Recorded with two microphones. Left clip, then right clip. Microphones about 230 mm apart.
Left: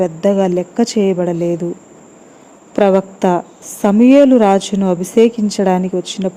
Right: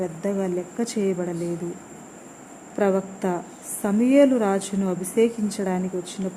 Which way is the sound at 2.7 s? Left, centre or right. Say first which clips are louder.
Left 11 dB; left.